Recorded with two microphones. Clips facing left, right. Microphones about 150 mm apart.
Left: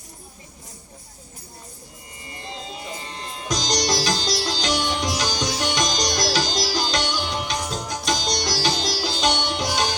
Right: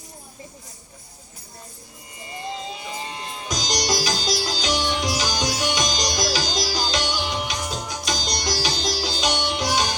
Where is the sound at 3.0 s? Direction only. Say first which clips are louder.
Even; 5° right (ahead or behind).